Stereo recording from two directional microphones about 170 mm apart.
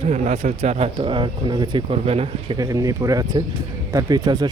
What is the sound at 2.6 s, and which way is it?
Speech, 20° right (ahead or behind).